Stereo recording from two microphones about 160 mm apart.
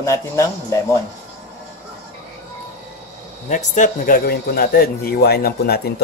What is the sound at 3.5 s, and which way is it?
Speech, 50° left (ahead or behind).